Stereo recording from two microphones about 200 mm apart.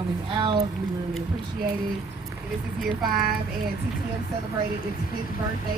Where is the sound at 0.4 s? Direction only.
25° right (ahead or behind).